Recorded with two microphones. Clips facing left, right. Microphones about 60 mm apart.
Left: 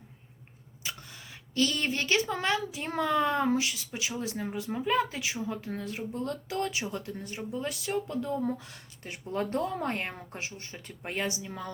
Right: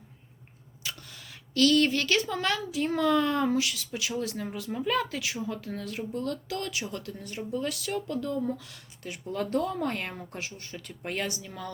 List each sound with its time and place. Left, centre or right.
0.8 s speech: left